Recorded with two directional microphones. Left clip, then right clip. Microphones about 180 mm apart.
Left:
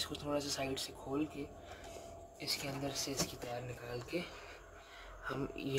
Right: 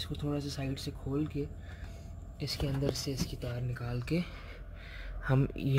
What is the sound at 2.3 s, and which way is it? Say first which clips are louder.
Speech: right 3 dB; 20° right (ahead or behind).